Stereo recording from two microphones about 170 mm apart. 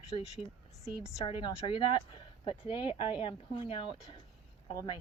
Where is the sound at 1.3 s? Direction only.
30° left (ahead or behind).